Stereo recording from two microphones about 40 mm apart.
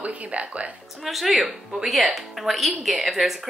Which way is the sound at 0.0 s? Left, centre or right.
Right.